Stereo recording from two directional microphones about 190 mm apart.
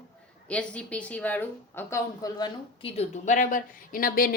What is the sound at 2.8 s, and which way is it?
Speech, 35° left (ahead or behind).